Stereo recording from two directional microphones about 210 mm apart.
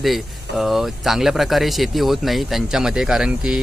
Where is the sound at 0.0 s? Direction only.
Centre (ahead or behind).